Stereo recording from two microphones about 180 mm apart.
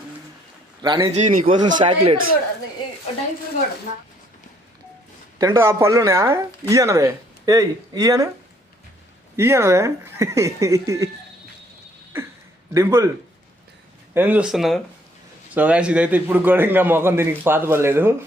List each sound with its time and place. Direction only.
0.8 s speech: 25° right (ahead or behind)
1.1 s speech: 45° right (ahead or behind)
1.6 s speech: 30° right (ahead or behind)
5.4 s speech: 15° right (ahead or behind)
9.3 s speech: 15° right (ahead or behind)
12.1 s a sound: 15° right (ahead or behind)
12.7 s speech: 15° right (ahead or behind)
14.1 s speech: 10° right (ahead or behind)